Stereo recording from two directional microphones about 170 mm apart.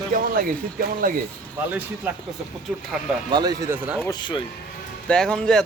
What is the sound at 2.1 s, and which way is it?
Speech, 10° right (ahead or behind).